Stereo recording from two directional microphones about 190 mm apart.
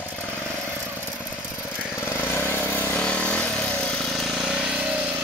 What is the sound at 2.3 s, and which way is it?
Vehicle, 10° left (ahead or behind).